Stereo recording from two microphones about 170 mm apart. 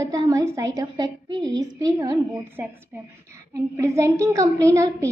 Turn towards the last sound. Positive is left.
turn(degrees=-20)  # may be behind; listen again after turning